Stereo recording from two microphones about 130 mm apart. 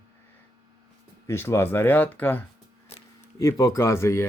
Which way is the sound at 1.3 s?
20° left (ahead or behind).